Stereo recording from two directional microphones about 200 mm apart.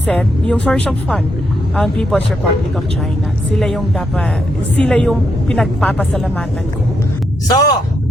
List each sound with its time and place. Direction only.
0.1 s speech: 5° left (ahead or behind)
3.5 s speech: centre (ahead or behind)
7.4 s speech: 20° left (ahead or behind)